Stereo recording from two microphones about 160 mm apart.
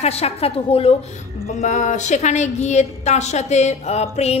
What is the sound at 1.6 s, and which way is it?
A woman's voice, 45° left (ahead or behind).